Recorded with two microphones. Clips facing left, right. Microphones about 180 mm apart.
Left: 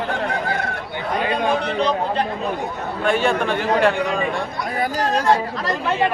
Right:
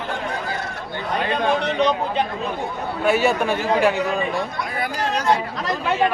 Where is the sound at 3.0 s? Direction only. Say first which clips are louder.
Right 1 dB; 5° right (ahead or behind).